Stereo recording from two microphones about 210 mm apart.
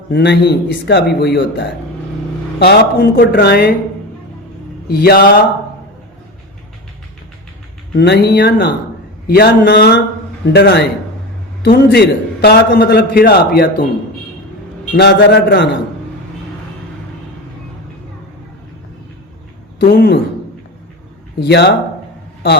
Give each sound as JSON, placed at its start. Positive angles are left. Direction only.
{"t": 0.1, "sound": "speech", "side_deg": 55}
{"t": 2.6, "sound": "a man's voice", "side_deg": 45}
{"t": 4.9, "sound": "a man's voice", "side_deg": 45}
{"t": 7.9, "sound": "a man's voice", "side_deg": 50}
{"t": 14.9, "sound": "a man's voice", "side_deg": 50}
{"t": 19.8, "sound": "a man's voice", "side_deg": 45}
{"t": 21.4, "sound": "a man's voice", "side_deg": 50}